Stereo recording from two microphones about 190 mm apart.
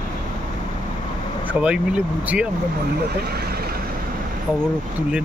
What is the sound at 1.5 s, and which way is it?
Speech, 5° right (ahead or behind).